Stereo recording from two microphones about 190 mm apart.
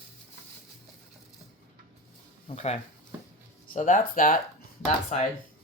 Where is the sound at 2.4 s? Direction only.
35° left (ahead or behind).